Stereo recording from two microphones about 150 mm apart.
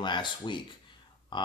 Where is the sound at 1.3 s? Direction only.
30° left (ahead or behind).